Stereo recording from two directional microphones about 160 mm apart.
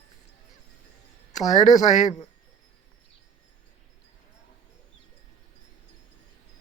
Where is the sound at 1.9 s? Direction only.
50° left (ahead or behind).